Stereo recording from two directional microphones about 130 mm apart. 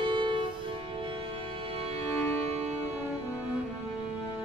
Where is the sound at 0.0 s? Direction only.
40° right (ahead or behind).